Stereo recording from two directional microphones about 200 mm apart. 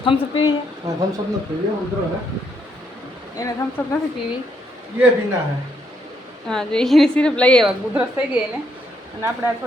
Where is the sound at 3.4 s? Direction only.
20° left (ahead or behind).